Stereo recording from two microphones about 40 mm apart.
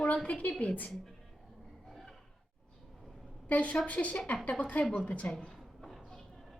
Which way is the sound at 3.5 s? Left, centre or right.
Left.